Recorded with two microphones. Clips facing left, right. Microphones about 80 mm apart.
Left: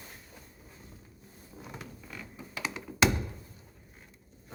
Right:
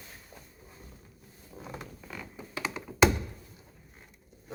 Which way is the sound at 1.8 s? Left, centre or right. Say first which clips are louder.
Right 2 dB; centre.